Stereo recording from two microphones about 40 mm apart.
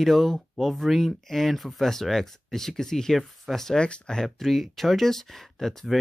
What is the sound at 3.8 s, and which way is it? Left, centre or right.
Speech, left.